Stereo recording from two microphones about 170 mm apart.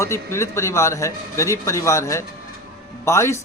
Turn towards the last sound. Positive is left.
turn(degrees=15)  # may be behind; listen again after turning